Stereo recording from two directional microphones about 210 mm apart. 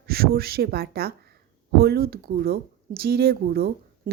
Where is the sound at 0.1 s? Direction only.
45° right (ahead or behind).